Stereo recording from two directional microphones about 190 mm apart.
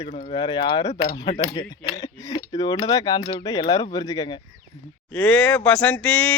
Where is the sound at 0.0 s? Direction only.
25° left (ahead or behind).